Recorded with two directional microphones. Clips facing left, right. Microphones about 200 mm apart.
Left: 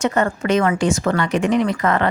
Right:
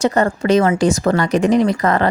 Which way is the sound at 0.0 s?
35° right (ahead or behind).